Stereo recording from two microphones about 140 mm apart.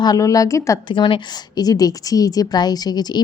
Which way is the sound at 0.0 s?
25° left (ahead or behind).